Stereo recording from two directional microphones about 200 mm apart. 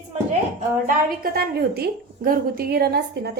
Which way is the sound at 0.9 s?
45° right (ahead or behind).